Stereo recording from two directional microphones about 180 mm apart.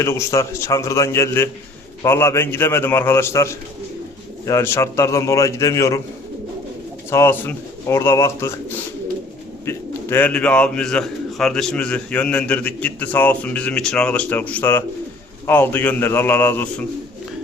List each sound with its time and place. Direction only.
0.0 s speech: 15° left (ahead or behind)
7.1 s speech: 15° left (ahead or behind)
9.6 s speech: 10° left (ahead or behind)